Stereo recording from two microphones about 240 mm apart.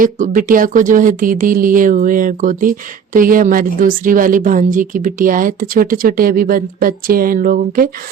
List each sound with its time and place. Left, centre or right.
0.0 s speech: right